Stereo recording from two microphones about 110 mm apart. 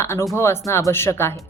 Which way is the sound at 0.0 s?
25° left (ahead or behind).